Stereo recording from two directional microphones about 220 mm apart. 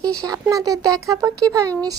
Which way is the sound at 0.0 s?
15° right (ahead or behind).